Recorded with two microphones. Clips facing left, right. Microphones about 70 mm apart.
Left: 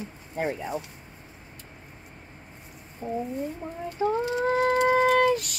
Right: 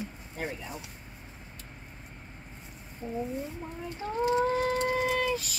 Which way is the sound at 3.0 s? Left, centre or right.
Left.